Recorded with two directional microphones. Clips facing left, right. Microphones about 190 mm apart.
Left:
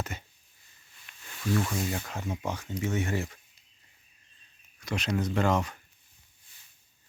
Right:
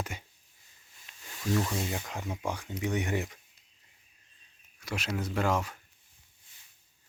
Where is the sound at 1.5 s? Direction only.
25° right (ahead or behind).